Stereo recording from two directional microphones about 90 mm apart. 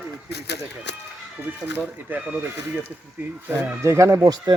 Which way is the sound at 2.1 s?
20° right (ahead or behind).